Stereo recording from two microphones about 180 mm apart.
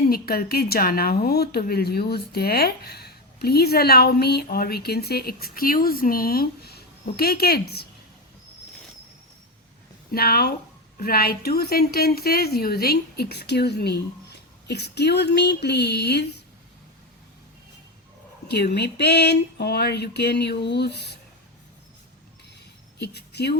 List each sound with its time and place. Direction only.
0.1 s a woman's voice: 55° left (ahead or behind)
10.1 s a woman's voice: 55° left (ahead or behind)
18.4 s a sound: 65° left (ahead or behind)
23.0 s a woman's voice: 65° left (ahead or behind)